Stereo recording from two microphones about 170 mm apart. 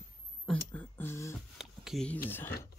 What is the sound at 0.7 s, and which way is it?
Speech, 15° left (ahead or behind).